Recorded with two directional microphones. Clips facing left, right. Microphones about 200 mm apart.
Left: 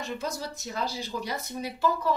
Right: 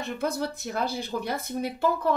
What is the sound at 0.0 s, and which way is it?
Speech, 60° right (ahead or behind).